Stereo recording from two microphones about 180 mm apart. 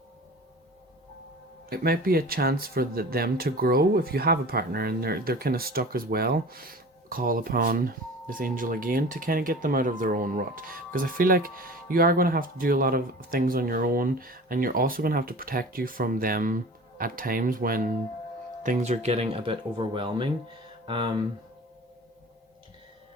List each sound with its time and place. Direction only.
1.7 s speech: 55° right (ahead or behind); by 21.2 s 30° right (ahead or behind)